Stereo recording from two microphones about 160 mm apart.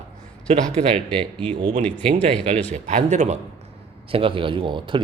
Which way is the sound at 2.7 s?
50° right (ahead or behind).